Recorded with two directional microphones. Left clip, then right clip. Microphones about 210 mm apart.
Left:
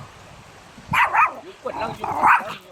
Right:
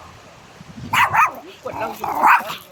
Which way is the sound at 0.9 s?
45° right (ahead or behind).